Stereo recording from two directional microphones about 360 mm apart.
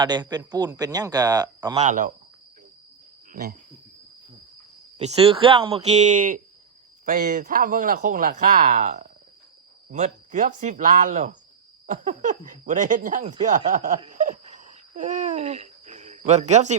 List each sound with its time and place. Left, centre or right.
0.0 s speech: centre
4.9 s speech: centre
13.7 s laughter: right